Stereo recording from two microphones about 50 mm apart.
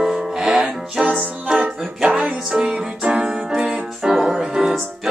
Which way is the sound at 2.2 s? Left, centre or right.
Centre.